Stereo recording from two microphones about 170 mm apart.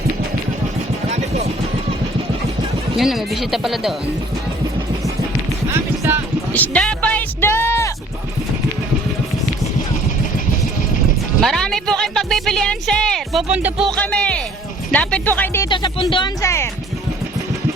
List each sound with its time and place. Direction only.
3.0 s speech: centre (ahead or behind)
6.5 s speech: 5° left (ahead or behind)
11.3 s speech: centre (ahead or behind)
13.5 s music: 10° right (ahead or behind)
13.9 s speech: 5° left (ahead or behind)
15.7 s speech: 30° left (ahead or behind)
16.4 s speech: 15° left (ahead or behind)